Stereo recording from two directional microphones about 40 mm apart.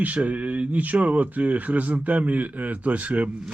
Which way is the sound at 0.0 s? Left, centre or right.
Right.